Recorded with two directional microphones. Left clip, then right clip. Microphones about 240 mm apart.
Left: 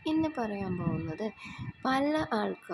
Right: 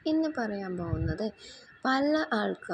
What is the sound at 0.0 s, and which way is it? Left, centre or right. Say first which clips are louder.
A woman's voice: right 2 dB; centre.